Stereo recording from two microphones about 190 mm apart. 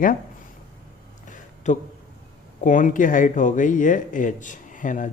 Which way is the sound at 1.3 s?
40° left (ahead or behind).